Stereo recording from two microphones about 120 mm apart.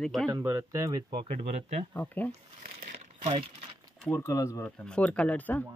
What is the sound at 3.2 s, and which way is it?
Speech, 45° right (ahead or behind).